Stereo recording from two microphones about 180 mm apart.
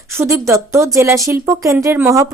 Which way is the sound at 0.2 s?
15° right (ahead or behind).